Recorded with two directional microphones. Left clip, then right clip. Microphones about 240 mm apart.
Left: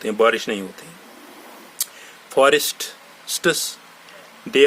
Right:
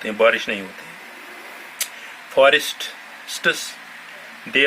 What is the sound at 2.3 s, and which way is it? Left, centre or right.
Speech, left.